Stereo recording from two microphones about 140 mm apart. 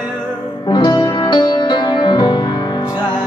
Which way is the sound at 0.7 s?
30° left (ahead or behind).